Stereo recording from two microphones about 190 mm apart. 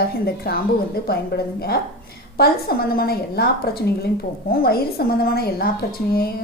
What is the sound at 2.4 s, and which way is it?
A woman's voice, 50° left (ahead or behind).